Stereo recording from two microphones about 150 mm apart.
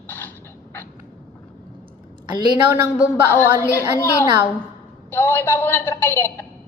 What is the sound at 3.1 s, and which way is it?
A woman's voice, 15° left (ahead or behind).